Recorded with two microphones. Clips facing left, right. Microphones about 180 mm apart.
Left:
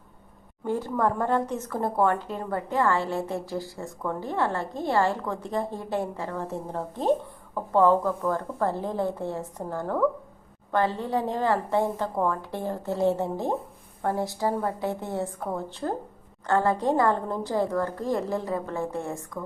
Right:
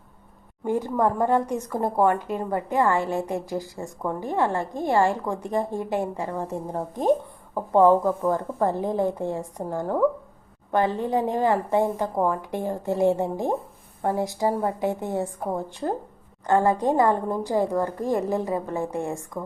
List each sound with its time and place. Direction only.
0.6 s a woman's voice: 15° right (ahead or behind)